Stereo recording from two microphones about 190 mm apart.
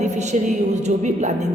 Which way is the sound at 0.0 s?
35° right (ahead or behind).